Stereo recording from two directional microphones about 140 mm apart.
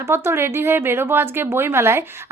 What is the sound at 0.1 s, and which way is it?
Speech, 15° right (ahead or behind).